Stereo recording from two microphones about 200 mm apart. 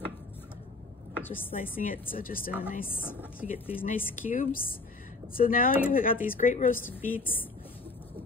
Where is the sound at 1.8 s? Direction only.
45° left (ahead or behind).